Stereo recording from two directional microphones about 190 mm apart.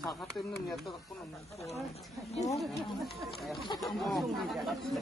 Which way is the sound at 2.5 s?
Centre (ahead or behind).